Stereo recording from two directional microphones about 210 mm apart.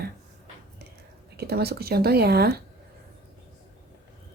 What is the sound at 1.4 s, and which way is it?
Speech, 50° right (ahead or behind).